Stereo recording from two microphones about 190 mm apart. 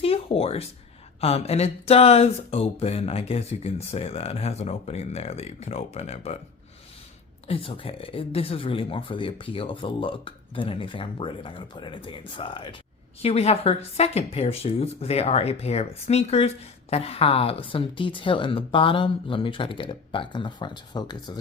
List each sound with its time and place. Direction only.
0.0 s a sound: 30° left (ahead or behind)
1.2 s speech: 30° left (ahead or behind)
7.4 s speech: 30° left (ahead or behind)